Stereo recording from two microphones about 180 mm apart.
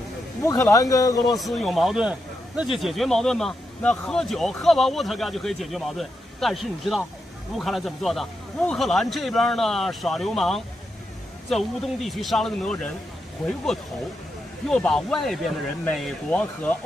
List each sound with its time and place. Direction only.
0.4 s speech: 20° left (ahead or behind)
1.2 s speech: centre (ahead or behind)
14.7 s speech: 5° left (ahead or behind)